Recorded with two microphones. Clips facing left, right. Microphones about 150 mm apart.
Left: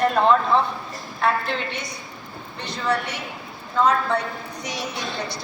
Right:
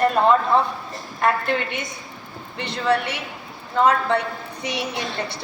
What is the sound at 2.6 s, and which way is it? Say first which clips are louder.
Speech: right 3 dB; 60° right (ahead or behind).